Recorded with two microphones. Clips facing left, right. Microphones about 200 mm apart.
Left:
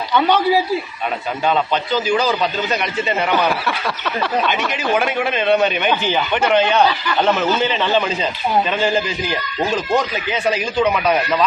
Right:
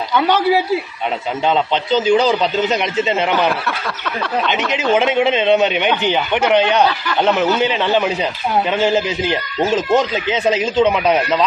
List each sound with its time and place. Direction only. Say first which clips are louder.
0.1 s a man's voice: even; 5° right (ahead or behind)
1.5 s a man's voice: right 2 dB; 20° right (ahead or behind)
4.7 s a man's voice: right 4 dB; 20° right (ahead or behind)